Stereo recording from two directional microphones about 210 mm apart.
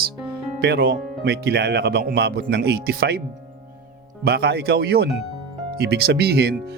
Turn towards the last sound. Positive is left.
turn(degrees=-50)  # may be behind; listen again after turning